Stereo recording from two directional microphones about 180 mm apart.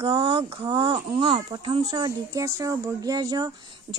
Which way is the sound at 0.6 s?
25° right (ahead or behind).